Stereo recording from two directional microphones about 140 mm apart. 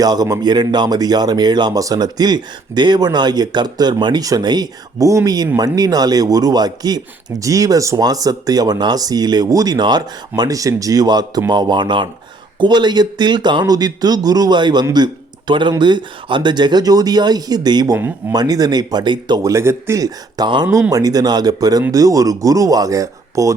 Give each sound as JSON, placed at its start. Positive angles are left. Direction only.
{"t": 0.0, "sound": "speech", "side_deg": -30}
{"t": 19.4, "sound": "speech", "side_deg": -20}